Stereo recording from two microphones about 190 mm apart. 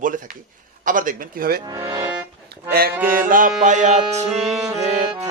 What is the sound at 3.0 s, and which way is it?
A man's voice, 45° right (ahead or behind).